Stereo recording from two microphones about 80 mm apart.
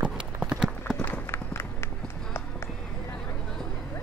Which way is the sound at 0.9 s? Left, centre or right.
Left.